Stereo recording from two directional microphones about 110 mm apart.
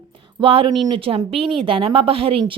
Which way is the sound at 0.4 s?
55° right (ahead or behind).